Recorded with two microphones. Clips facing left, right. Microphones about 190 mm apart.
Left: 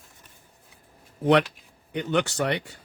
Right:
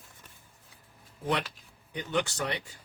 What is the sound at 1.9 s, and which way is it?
Speech, 65° left (ahead or behind).